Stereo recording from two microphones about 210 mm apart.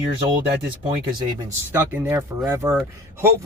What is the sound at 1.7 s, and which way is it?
Speech, 10° right (ahead or behind).